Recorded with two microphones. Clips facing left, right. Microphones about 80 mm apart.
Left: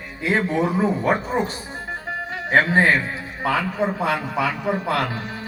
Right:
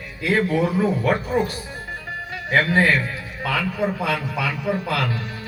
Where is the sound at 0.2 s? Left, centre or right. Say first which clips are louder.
Right 1 dB; left.